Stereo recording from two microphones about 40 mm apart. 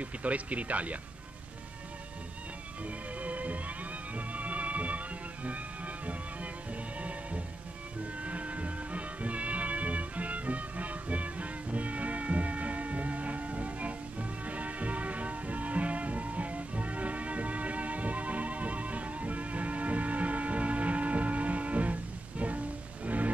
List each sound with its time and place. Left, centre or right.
0.0 s speech: right
3.2 s music: right
7.0 s music: right
23.0 s music: right